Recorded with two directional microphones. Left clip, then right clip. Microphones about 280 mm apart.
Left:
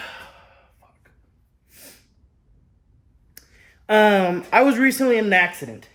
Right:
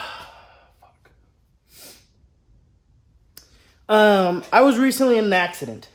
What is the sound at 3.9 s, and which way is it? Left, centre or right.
Speech, centre.